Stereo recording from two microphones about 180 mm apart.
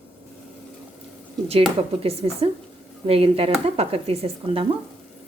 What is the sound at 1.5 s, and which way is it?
Speech, 35° right (ahead or behind).